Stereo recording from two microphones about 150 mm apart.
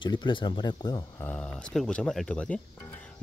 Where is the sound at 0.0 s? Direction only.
30° left (ahead or behind).